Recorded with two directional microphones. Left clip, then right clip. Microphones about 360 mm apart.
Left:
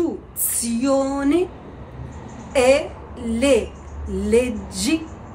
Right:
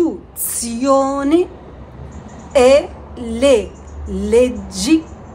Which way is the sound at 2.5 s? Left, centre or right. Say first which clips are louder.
Right 6 dB; centre.